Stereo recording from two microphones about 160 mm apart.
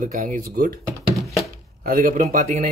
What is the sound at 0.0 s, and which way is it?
Speech, 55° right (ahead or behind).